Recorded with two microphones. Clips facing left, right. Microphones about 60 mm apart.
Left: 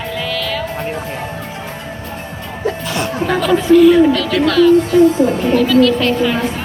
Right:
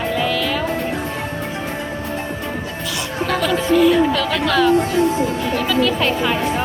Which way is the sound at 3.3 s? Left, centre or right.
Centre.